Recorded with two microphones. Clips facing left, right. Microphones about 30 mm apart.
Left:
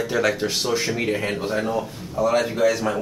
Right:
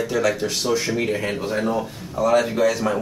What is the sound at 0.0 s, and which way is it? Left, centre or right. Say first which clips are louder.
Speech: even; centre.